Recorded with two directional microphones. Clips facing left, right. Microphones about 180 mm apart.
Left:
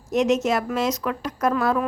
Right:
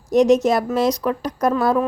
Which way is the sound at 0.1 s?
35° right (ahead or behind).